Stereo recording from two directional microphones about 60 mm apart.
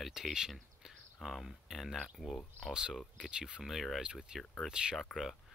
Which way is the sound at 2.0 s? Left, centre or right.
Centre.